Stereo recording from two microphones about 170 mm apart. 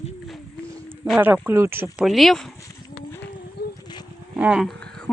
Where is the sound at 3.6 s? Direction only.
70° left (ahead or behind).